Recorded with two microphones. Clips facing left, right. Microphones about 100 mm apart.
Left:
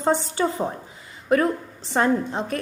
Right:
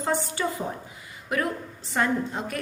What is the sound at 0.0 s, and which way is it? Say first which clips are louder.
Speech: left 5 dB; 30° left (ahead or behind).